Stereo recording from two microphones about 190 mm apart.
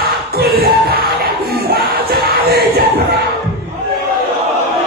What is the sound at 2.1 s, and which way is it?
Music, 55° right (ahead or behind).